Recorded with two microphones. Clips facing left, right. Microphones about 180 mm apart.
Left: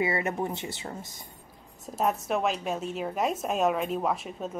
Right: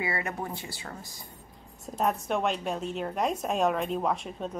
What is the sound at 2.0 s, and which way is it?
A woman's voice, centre (ahead or behind).